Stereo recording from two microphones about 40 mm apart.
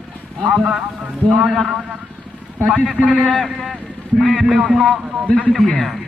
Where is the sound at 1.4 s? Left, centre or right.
Centre.